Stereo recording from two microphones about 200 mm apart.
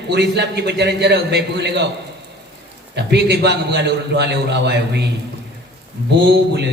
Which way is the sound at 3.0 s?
55° right (ahead or behind).